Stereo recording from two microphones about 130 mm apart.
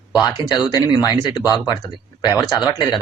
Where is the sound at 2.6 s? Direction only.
30° left (ahead or behind).